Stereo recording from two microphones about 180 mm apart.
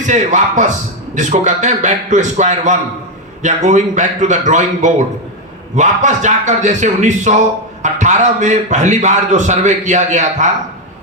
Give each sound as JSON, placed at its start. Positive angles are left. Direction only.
{"t": 0.1, "sound": "a man's voice", "side_deg": -45}